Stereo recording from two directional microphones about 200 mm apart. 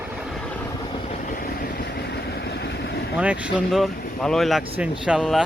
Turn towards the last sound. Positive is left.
turn(degrees=-5)  # may be behind; listen again after turning